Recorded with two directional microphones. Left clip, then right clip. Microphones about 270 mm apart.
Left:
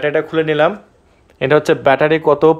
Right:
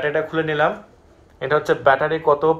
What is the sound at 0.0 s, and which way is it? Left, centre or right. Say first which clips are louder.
Speech: left 5 dB; left.